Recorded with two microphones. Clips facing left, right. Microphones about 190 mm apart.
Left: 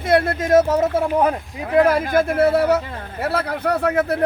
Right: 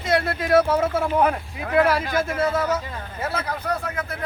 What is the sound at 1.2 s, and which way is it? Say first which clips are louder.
Speech: left 2 dB; 35° left (ahead or behind).